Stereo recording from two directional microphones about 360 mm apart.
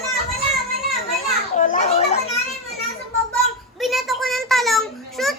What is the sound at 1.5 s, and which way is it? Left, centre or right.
Children playing, left.